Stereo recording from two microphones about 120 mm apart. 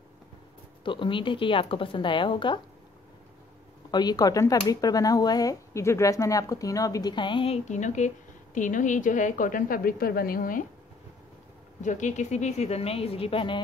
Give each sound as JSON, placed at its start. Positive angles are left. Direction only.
{"t": 0.8, "sound": "a woman's voice", "side_deg": 45}
{"t": 3.9, "sound": "speech", "side_deg": 35}
{"t": 7.6, "sound": "a woman's voice", "side_deg": 85}
{"t": 11.8, "sound": "a woman's voice", "side_deg": 90}